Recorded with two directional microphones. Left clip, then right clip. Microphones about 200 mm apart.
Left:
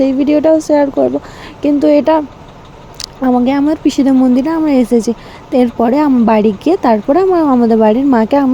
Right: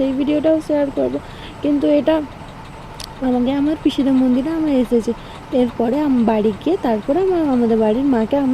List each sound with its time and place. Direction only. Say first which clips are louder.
0.0 s speech: left 7 dB; 20° left (ahead or behind)